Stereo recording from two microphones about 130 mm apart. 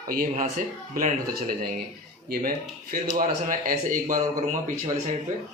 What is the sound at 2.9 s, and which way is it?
A man's voice, 80° right.